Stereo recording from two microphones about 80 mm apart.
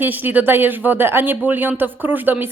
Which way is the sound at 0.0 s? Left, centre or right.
Right.